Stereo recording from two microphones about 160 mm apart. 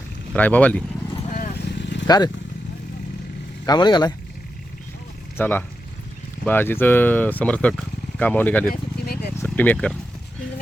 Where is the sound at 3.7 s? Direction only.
25° left (ahead or behind).